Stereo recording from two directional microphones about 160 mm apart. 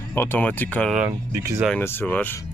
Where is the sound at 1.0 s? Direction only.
15° right (ahead or behind).